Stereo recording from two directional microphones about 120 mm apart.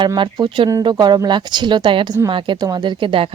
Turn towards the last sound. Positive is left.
turn(degrees=-45)  # may be behind; listen again after turning